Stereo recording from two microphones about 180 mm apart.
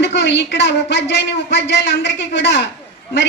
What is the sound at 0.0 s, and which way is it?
A woman's voice, 75° left (ahead or behind).